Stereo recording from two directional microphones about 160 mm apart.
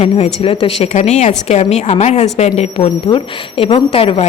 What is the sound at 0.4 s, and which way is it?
Speech, 35° left (ahead or behind).